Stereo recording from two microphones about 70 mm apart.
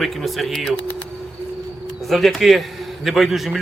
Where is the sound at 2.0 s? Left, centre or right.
Centre.